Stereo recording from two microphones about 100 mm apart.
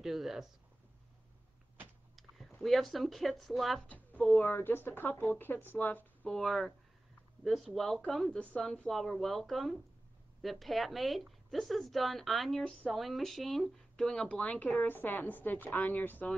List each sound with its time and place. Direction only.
0.0 s speech: 5° right (ahead or behind)
2.6 s speech: centre (ahead or behind)
4.4 s speech: 20° left (ahead or behind)
6.2 s a woman's voice: 5° left (ahead or behind)